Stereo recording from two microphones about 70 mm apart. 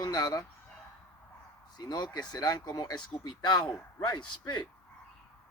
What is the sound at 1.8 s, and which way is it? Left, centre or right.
Speech, left.